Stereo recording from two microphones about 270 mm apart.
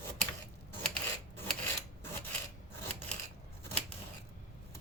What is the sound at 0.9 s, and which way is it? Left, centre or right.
Filing, centre.